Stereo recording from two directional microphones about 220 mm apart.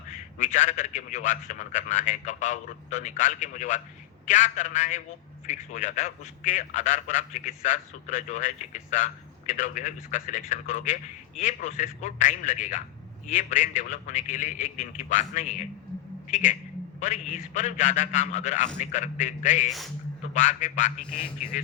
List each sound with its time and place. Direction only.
0.1 s a man's voice: 35° left (ahead or behind)